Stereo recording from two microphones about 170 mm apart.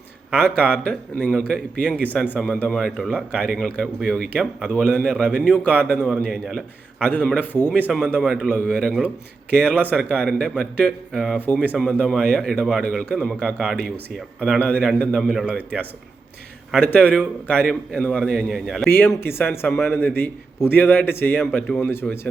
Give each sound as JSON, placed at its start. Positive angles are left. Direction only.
{"t": 0.3, "sound": "a man's voice", "side_deg": 5}
{"t": 10.1, "sound": "a man's voice", "side_deg": 5}
{"t": 16.7, "sound": "a man's voice", "side_deg": 10}
{"t": 18.9, "sound": "a man's voice", "side_deg": 15}